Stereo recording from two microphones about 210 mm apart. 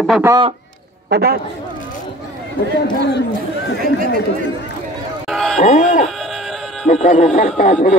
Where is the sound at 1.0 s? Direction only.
50° right (ahead or behind).